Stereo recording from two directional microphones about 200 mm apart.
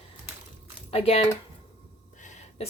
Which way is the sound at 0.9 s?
30° left (ahead or behind).